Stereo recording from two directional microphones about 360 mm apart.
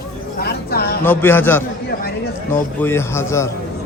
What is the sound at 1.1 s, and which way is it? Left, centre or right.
Speech, centre.